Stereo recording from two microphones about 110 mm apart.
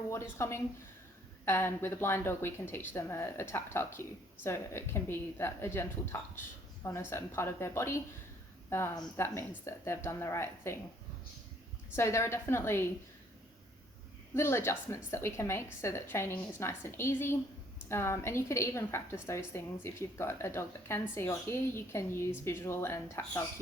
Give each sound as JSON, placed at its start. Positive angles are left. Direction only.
{"t": 0.1, "sound": "a woman's voice", "side_deg": 25}
{"t": 9.1, "sound": "a woman's voice", "side_deg": 20}
{"t": 11.9, "sound": "a woman's voice", "side_deg": 25}
{"t": 14.3, "sound": "a woman's voice", "side_deg": 25}